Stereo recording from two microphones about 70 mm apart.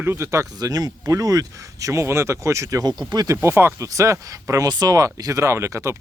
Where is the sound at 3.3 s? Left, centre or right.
Right.